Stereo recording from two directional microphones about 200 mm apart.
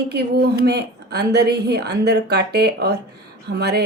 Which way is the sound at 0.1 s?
50° right (ahead or behind).